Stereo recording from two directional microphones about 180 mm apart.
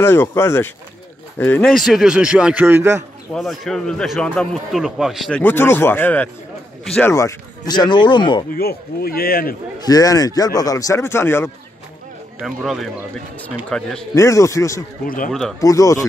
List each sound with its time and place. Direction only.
0.0 s a man's voice: 15° left (ahead or behind); by 3.0 s 15° right (ahead or behind)
3.3 s a man's voice: centre (ahead or behind)
5.4 s speech: 10° left (ahead or behind)
7.1 s speech: 15° left (ahead or behind)
8.5 s speech: 60° left (ahead or behind)
9.8 s speech: 20° left (ahead or behind)
12.4 s a man's voice: centre (ahead or behind)
14.1 s speech: 15° left (ahead or behind)
15.0 s speech: 50° left (ahead or behind)
15.6 s speech: 20° left (ahead or behind)